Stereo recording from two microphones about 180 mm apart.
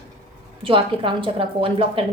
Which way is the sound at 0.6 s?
30° right (ahead or behind).